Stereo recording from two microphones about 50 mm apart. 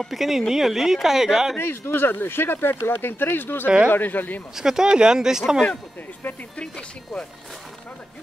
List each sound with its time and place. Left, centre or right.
0.1 s speech: centre
1.6 s speech: left
3.6 s speech: right
3.9 s speech: left
4.6 s speech: centre
6.6 s speech: centre